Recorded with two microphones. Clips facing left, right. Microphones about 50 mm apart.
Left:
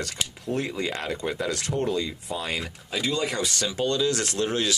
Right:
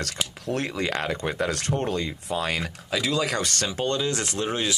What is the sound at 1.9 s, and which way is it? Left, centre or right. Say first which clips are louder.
Speech: even; right.